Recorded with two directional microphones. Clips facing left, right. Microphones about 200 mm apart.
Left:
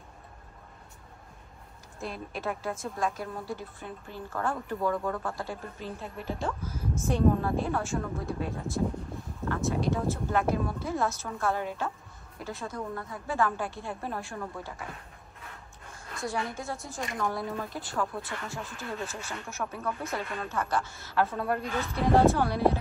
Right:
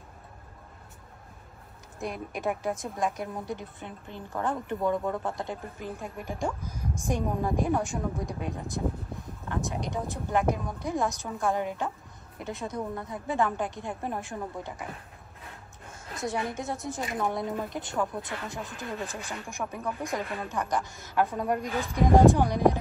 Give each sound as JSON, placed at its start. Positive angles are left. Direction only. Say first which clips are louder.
{"t": 2.0, "sound": "a woman's voice", "louder": "right 2 dB", "side_deg": -15}
{"t": 16.1, "sound": "a sound", "louder": "right 2 dB", "side_deg": -20}
{"t": 16.5, "sound": "a woman's voice", "louder": "right 3 dB", "side_deg": -20}